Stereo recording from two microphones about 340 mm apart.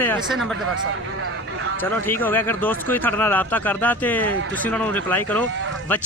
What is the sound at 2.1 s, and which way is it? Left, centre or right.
Speech, centre.